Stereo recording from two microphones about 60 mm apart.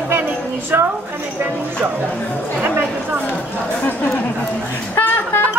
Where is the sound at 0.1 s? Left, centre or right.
Right.